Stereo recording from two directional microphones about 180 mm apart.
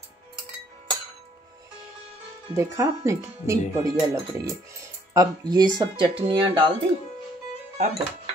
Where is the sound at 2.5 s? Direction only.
15° right (ahead or behind).